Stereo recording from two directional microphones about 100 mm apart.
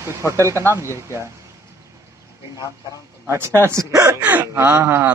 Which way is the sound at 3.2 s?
25° right (ahead or behind).